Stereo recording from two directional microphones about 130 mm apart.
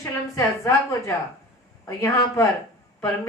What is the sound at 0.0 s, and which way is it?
A woman's voice, 25° left (ahead or behind).